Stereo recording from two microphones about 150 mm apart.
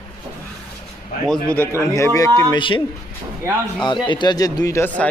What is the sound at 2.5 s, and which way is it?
Speech, 35° left (ahead or behind).